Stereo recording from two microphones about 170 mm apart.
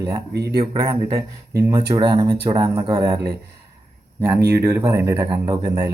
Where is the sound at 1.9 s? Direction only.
25° right (ahead or behind).